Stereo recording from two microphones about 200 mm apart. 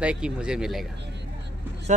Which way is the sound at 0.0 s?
5° right (ahead or behind).